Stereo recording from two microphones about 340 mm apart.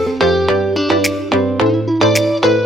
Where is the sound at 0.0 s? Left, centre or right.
Centre.